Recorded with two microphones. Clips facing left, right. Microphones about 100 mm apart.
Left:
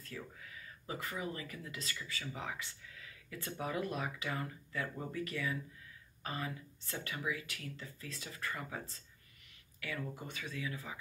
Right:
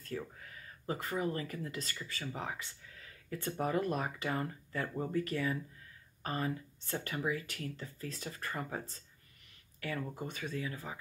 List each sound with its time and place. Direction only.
0.0 s speech: 40° right (ahead or behind)